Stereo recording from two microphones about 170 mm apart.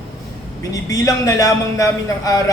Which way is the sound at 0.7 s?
20° left (ahead or behind).